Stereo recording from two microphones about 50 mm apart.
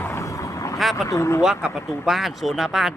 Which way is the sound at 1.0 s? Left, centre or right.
Left.